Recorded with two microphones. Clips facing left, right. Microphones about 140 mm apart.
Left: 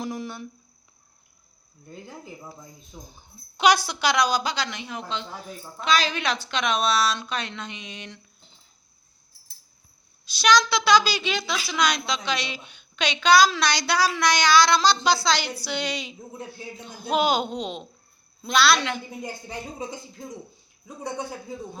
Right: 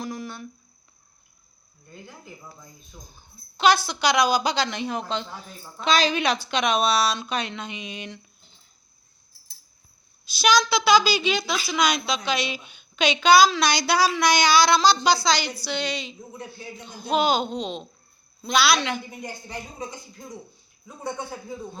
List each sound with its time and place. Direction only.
0.0 s speech: 20° left (ahead or behind)
2.9 s speech: 20° left (ahead or behind)
4.1 s a woman's voice: 10° right (ahead or behind)
4.5 s a woman's voice: 30° right (ahead or behind)
5.8 s a woman's voice: 25° right (ahead or behind)
10.2 s a woman's voice: 10° right (ahead or behind)